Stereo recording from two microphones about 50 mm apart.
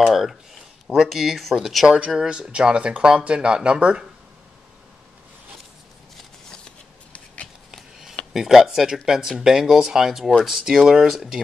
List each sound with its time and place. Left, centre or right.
0.1 s speech: centre
2.1 s speech: centre
7.7 s a sound: centre
8.3 s speech: centre